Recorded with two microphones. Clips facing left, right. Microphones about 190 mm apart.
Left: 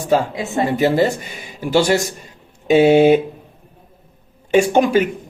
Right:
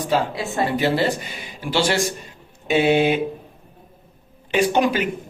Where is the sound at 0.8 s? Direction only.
45° left (ahead or behind).